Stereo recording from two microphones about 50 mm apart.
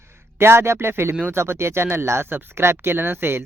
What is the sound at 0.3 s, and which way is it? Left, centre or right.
Speech, right.